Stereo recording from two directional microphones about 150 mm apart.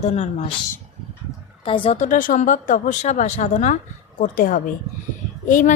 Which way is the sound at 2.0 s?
60° left (ahead or behind).